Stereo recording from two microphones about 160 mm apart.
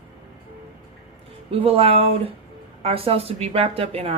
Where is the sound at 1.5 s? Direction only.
35° right (ahead or behind).